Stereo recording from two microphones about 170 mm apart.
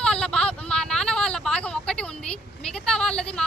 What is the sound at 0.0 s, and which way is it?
Vehicle, 5° left (ahead or behind).